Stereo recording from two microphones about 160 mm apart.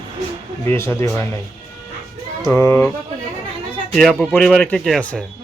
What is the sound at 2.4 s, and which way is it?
Speech, 15° left (ahead or behind).